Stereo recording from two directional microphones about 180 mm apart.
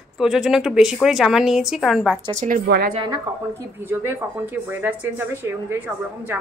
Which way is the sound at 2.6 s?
65° right (ahead or behind).